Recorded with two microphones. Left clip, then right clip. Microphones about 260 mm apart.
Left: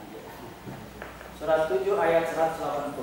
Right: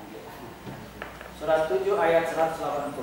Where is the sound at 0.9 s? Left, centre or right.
Centre.